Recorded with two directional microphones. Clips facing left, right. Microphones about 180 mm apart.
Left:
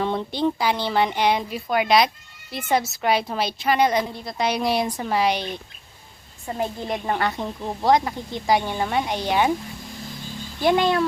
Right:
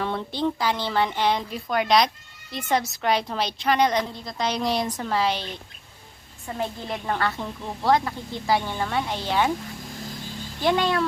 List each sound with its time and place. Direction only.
0.0 s a woman's voice: 20° left (ahead or behind)
6.6 s a woman's voice: 15° left (ahead or behind)
10.6 s a woman's voice: 10° left (ahead or behind)